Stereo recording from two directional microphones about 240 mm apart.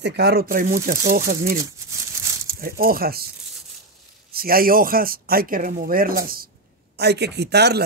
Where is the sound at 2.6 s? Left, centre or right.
Right.